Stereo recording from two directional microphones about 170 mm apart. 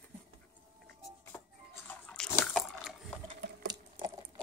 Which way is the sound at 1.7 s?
10° left (ahead or behind).